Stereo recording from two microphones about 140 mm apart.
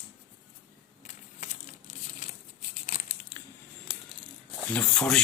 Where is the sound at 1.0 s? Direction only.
60° left (ahead or behind).